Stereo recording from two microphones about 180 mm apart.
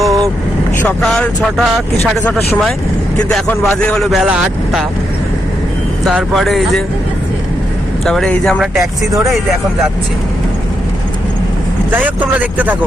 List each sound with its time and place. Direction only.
0.0 s vehicle: centre (ahead or behind)
0.8 s speech: 5° left (ahead or behind)
6.1 s speech: centre (ahead or behind)
8.0 s speech: centre (ahead or behind)
8.8 s speech: 15° right (ahead or behind)
11.9 s speech: 10° right (ahead or behind)